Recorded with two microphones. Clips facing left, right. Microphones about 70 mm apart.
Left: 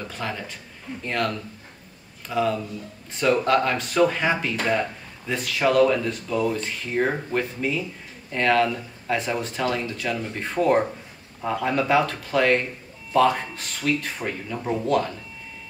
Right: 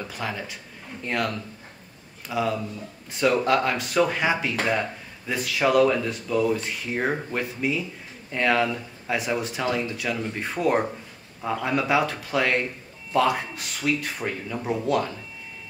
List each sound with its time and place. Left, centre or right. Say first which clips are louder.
0.1 s speech: even; centre